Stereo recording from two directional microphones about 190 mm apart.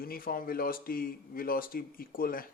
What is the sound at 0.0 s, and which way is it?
Speech, 50° left (ahead or behind).